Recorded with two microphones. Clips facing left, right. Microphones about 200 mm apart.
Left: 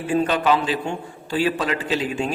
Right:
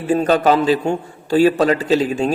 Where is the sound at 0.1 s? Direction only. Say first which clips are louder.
Right 5 dB; 40° right (ahead or behind).